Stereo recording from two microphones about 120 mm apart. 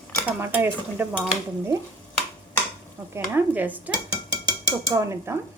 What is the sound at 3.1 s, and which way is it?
Stir, 15° right (ahead or behind).